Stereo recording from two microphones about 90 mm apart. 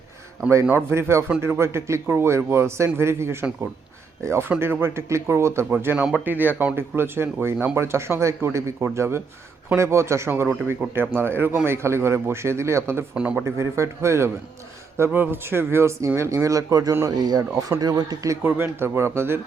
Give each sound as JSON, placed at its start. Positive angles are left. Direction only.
{"t": 0.9, "sound": "a man's voice", "side_deg": -30}
{"t": 13.1, "sound": "speech", "side_deg": -10}
{"t": 13.4, "sound": "speech", "side_deg": -30}
{"t": 17.1, "sound": "speech", "side_deg": -45}
{"t": 18.3, "sound": "a man's voice", "side_deg": -25}